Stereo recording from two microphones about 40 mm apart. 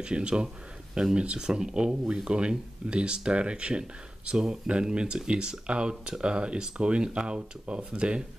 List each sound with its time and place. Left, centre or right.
0.0 s speech: right